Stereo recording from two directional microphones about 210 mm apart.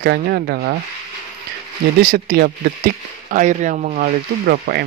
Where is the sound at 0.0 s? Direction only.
50° right (ahead or behind).